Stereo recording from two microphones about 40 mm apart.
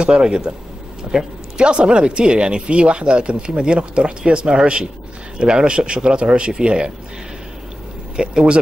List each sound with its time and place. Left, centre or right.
0.0 s speech: right
1.6 s speech: right
8.2 s speech: right